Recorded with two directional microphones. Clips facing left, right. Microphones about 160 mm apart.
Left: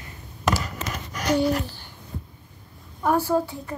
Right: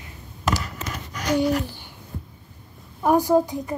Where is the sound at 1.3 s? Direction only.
15° right (ahead or behind).